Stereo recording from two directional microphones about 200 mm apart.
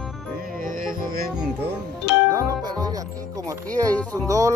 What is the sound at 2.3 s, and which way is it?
Music, 20° right (ahead or behind).